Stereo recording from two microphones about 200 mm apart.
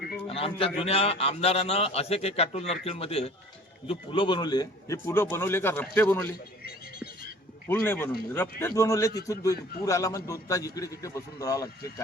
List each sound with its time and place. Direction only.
0.3 s a man's voice: 30° left (ahead or behind); by 6.3 s 10° left (ahead or behind)
7.7 s speech: 10° left (ahead or behind)